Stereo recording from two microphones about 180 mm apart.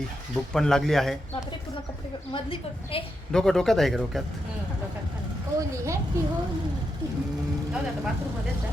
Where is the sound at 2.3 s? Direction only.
30° left (ahead or behind).